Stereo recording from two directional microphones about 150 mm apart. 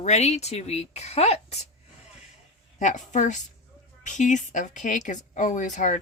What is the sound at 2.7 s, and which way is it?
A woman's voice, 55° left (ahead or behind).